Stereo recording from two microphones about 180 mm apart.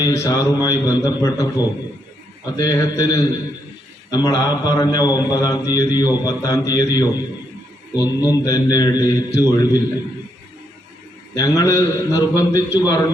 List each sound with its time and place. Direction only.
0.0 s a man's voice: 15° left (ahead or behind)
11.3 s a man's voice: 20° left (ahead or behind)